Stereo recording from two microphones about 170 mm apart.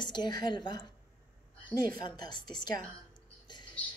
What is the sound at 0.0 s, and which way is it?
A woman's voice, 25° left (ahead or behind).